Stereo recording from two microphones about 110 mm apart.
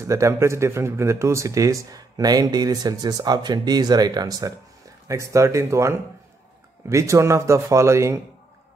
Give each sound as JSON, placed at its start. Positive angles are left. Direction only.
{"t": 0.0, "sound": "speech", "side_deg": -25}